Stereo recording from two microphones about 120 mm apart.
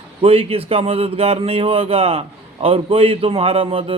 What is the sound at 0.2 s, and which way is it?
Speech, 55° right (ahead or behind).